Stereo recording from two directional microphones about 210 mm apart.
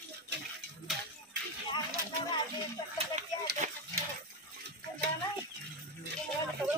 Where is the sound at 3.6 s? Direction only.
40° right (ahead or behind).